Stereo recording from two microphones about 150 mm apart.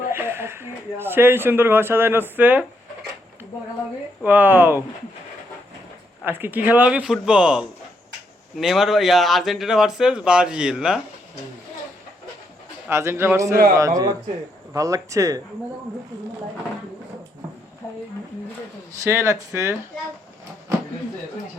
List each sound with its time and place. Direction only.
0.1 s speech: 15° right (ahead or behind)
4.2 s speech: 10° right (ahead or behind)
6.2 s speech: 15° right (ahead or behind)
12.9 s speech: 15° right (ahead or behind)
19.0 s speech: 20° right (ahead or behind)